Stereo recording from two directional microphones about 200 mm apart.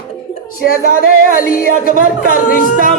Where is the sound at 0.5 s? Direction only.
45° left (ahead or behind).